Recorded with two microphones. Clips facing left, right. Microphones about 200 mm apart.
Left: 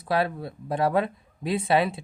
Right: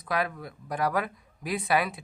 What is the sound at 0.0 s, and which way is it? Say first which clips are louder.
Speech: left 5 dB; 30° left (ahead or behind).